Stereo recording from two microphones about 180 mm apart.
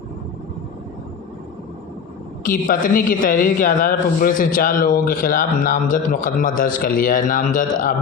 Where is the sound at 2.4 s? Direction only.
45° left (ahead or behind).